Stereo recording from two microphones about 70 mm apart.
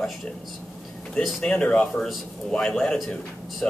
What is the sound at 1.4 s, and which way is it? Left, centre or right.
Speech, centre.